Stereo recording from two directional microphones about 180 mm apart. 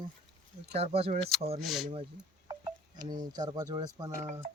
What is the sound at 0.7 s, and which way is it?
Speech, 35° right (ahead or behind).